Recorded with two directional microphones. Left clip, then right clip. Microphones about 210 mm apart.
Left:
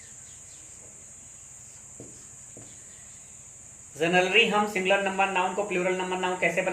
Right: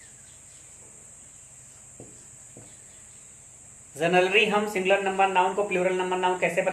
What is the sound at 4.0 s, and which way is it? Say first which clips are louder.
Speech: right 1 dB; 30° right (ahead or behind).